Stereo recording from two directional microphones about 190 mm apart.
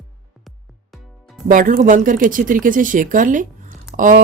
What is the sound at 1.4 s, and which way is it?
Speech, 45° right (ahead or behind).